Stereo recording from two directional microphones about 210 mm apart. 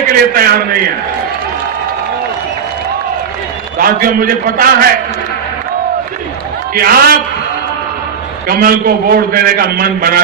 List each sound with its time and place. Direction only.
0.3 s a man's voice: 45° right (ahead or behind)
3.7 s a man's voice: 45° right (ahead or behind)
6.7 s a man's voice: 45° right (ahead or behind)
8.5 s a man's voice: 45° right (ahead or behind)